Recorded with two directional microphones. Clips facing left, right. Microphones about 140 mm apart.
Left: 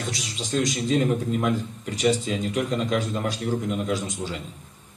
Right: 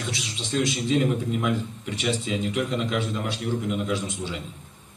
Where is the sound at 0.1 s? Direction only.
40° left (ahead or behind).